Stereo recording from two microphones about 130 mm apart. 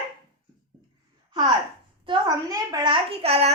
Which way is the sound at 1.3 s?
35° right (ahead or behind).